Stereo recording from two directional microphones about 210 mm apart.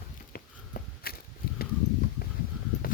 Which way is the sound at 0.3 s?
45° left (ahead or behind).